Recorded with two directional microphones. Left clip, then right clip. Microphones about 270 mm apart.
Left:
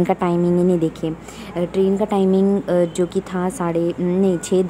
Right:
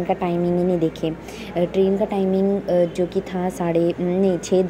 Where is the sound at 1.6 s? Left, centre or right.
Centre.